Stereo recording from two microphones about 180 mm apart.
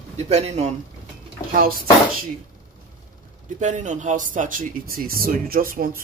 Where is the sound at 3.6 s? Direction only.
45° right (ahead or behind).